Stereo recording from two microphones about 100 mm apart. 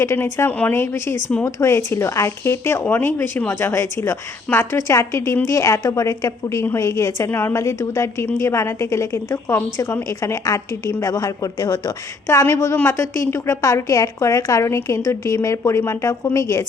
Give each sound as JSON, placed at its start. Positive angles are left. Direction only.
{"t": 0.0, "sound": "a woman's voice", "side_deg": 30}
{"t": 7.3, "sound": "speech", "side_deg": 20}
{"t": 7.5, "sound": "a woman's voice", "side_deg": 35}
{"t": 12.7, "sound": "speech", "side_deg": 20}
{"t": 13.1, "sound": "a woman's voice", "side_deg": 30}